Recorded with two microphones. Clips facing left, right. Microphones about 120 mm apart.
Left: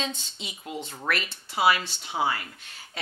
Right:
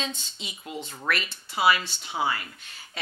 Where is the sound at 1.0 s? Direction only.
45° left (ahead or behind).